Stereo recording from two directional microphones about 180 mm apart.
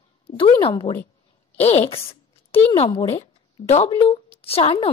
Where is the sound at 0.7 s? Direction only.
15° left (ahead or behind).